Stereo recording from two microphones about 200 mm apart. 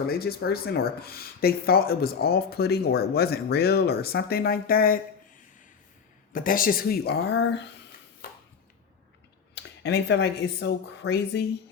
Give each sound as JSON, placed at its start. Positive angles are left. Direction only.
{"t": 0.1, "sound": "speech", "side_deg": 50}
{"t": 6.3, "sound": "speech", "side_deg": 45}
{"t": 9.6, "sound": "speech", "side_deg": 55}